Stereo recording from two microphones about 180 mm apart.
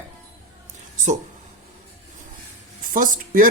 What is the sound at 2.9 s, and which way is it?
Speech, 50° right (ahead or behind).